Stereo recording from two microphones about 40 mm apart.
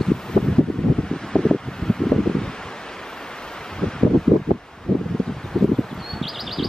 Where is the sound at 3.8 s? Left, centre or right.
Centre.